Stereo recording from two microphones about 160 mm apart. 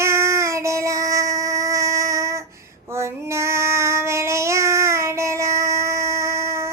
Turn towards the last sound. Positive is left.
turn(degrees=-15)  # may be behind; listen again after turning